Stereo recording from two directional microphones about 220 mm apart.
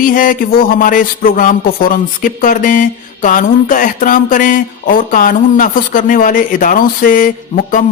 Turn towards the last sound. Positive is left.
turn(degrees=35)  # may be behind; listen again after turning